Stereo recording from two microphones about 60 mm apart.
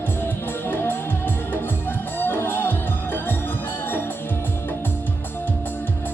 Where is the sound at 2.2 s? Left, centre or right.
Left.